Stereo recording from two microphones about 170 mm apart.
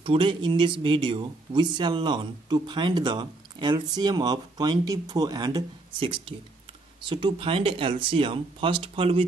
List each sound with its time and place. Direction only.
0.0 s speech: 30° right (ahead or behind)